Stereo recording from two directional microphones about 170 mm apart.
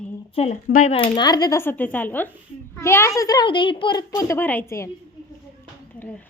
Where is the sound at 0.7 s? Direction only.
50° left (ahead or behind).